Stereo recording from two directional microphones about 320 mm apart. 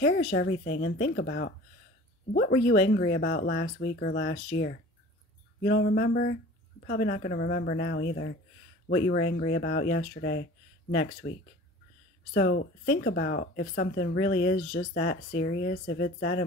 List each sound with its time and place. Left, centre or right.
0.3 s speech: left
5.7 s speech: left